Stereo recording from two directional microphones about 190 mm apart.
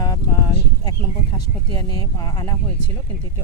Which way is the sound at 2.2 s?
20° left (ahead or behind).